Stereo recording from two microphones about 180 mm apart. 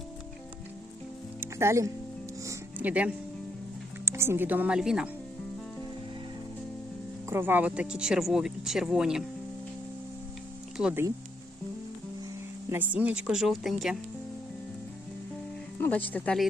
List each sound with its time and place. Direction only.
1.4 s music: 15° right (ahead or behind)
2.4 s speech: 15° right (ahead or behind)
7.3 s speech: 10° right (ahead or behind)
10.8 s speech: 5° right (ahead or behind)
12.7 s speech: 10° right (ahead or behind)
15.8 s speech: 10° left (ahead or behind)